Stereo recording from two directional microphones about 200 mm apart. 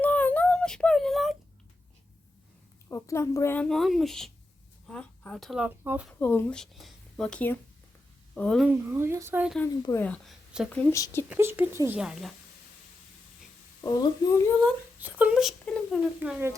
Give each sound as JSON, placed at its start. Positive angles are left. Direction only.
{"t": 0.0, "sound": "a sound", "side_deg": 10}
{"t": 2.9, "sound": "speech", "side_deg": 15}
{"t": 6.1, "sound": "speech", "side_deg": 10}
{"t": 8.6, "sound": "speech", "side_deg": -10}
{"t": 9.8, "sound": "a woman's voice", "side_deg": 10}
{"t": 11.3, "sound": "speech", "side_deg": -10}
{"t": 13.8, "sound": "a woman's voice", "side_deg": 15}
{"t": 14.9, "sound": "speech", "side_deg": -5}
{"t": 16.2, "sound": "speech", "side_deg": -10}